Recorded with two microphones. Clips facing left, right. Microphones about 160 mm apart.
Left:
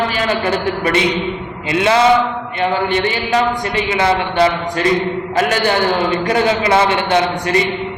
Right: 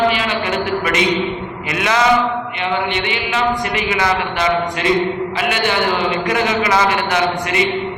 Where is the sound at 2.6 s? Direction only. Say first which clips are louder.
Left 6 dB; 40° left (ahead or behind).